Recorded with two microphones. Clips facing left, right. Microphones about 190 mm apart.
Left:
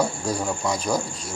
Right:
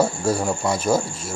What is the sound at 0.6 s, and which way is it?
Speech, 25° right (ahead or behind).